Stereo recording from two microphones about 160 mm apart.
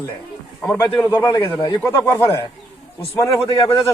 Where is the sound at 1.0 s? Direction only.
20° left (ahead or behind).